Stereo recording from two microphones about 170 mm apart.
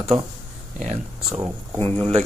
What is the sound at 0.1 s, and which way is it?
Speech, 40° right (ahead or behind).